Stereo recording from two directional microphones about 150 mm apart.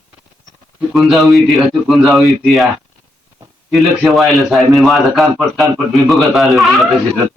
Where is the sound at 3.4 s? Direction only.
25° right (ahead or behind).